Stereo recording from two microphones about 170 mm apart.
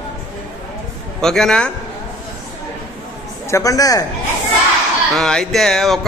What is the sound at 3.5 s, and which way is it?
Speech, 20° left (ahead or behind).